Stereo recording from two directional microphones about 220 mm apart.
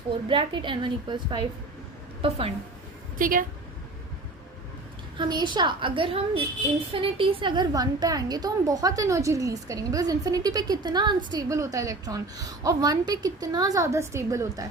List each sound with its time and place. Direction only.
0.3 s a woman's voice: 20° right (ahead or behind)
3.2 s a woman's voice: 40° right (ahead or behind)
5.1 s a woman's voice: 20° right (ahead or behind)